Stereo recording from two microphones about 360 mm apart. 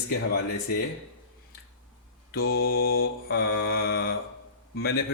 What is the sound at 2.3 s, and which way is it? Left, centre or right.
A man's voice, left.